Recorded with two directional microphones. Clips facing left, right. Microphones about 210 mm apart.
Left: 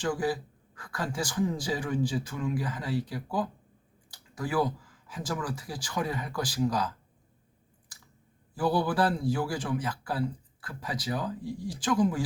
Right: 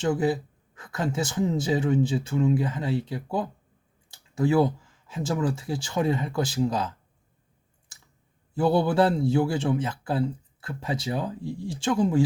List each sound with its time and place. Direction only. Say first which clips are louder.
0.0 s a man's voice: right 5 dB; 25° right (ahead or behind)
8.5 s a man's voice: right 5 dB; 25° right (ahead or behind)